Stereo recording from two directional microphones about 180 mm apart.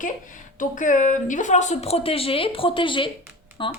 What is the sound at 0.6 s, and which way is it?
A woman's voice, 45° left (ahead or behind).